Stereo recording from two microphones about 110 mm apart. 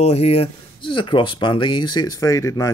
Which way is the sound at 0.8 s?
45° left (ahead or behind).